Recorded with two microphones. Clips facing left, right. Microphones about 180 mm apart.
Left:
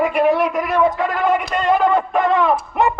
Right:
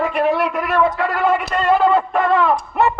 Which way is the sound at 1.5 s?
15° left (ahead or behind).